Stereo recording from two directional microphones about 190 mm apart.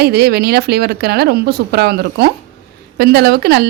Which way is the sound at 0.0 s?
60° right (ahead or behind).